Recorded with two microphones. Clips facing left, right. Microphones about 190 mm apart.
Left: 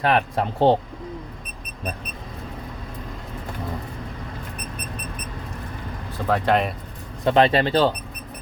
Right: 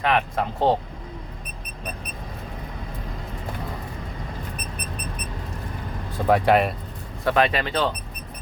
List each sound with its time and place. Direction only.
0.0 s speech: 30° left (ahead or behind)
6.2 s speech: 10° right (ahead or behind)
7.3 s speech: 30° left (ahead or behind)